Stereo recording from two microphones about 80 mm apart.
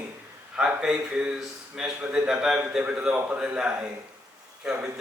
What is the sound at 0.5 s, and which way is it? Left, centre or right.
A man's voice, centre.